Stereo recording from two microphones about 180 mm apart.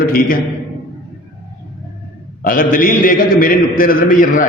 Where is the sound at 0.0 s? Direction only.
55° left (ahead or behind).